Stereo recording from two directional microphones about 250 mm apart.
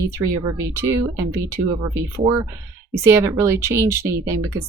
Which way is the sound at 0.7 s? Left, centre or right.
Centre.